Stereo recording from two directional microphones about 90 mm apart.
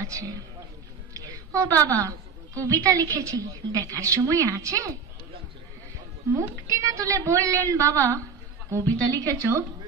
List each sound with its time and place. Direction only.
0.0 s a sound: 40° right (ahead or behind)
1.1 s a woman's voice: 40° right (ahead or behind)
6.3 s a woman's voice: 35° right (ahead or behind)